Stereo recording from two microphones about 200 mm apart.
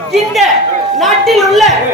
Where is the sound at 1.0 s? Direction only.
Centre (ahead or behind).